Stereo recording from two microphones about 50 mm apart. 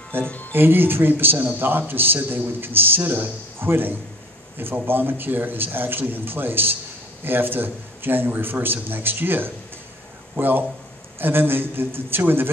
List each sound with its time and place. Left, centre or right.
0.1 s speech: right
3.5 s a man's voice: right